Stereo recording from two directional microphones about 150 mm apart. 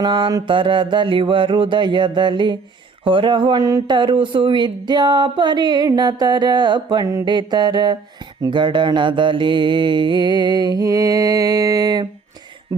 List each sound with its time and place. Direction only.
0.0 s mantra: 30° right (ahead or behind)
3.0 s speech: 35° right (ahead or behind)